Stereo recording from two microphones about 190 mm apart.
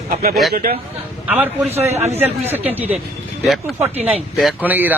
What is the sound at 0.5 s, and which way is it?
Speech, 50° right (ahead or behind).